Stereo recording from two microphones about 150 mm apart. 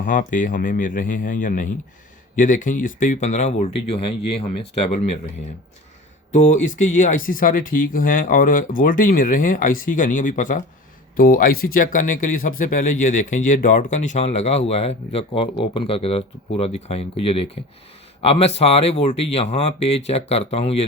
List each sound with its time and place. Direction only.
0.0 s speech: 60° left (ahead or behind); by 4.4 s 40° left (ahead or behind)
6.3 s speech: 60° left (ahead or behind)
11.2 s speech: 75° left (ahead or behind); by 20.8 s 45° left (ahead or behind)